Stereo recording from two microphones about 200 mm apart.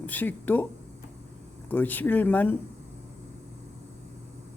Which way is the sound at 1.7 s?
10° left (ahead or behind).